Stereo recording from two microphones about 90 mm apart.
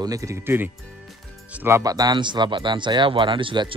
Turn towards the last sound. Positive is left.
turn(degrees=-70)  # may be behind; listen again after turning